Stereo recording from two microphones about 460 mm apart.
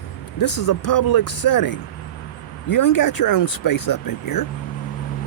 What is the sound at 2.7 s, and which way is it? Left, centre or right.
Speech, left.